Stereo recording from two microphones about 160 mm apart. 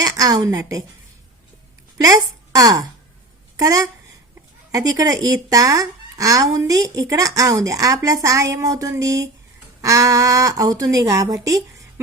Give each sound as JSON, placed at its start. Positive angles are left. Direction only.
{"t": 0.0, "sound": "speech", "side_deg": -25}
{"t": 2.0, "sound": "a woman's voice", "side_deg": -20}